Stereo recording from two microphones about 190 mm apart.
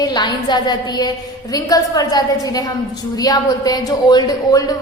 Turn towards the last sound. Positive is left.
turn(degrees=20)  # may be behind; listen again after turning